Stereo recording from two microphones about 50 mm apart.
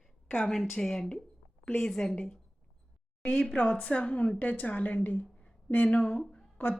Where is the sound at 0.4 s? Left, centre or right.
Centre.